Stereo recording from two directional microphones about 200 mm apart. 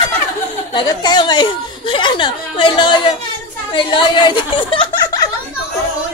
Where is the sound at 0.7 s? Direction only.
20° left (ahead or behind).